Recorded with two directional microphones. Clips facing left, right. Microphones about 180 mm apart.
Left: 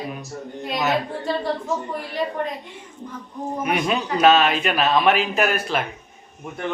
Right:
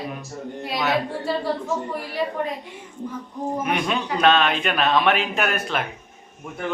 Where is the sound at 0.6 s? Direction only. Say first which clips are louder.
Left 1 dB; centre (ahead or behind).